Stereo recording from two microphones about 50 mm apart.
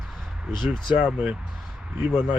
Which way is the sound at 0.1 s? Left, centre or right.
Centre.